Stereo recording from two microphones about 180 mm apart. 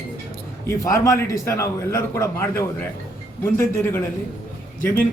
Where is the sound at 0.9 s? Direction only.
15° left (ahead or behind).